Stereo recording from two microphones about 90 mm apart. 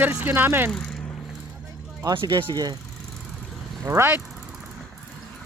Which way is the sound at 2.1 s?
65° right (ahead or behind).